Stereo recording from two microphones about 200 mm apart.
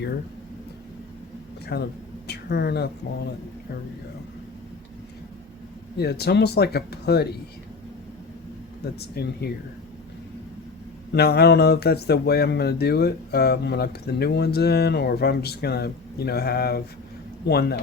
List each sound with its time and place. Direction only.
1.7 s speech: 60° left (ahead or behind)
6.0 s speech: 55° left (ahead or behind)
8.8 s speech: 50° left (ahead or behind)
11.1 s speech: 55° left (ahead or behind)